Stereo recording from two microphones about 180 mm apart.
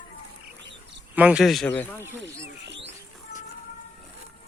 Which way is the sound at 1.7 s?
10° left (ahead or behind).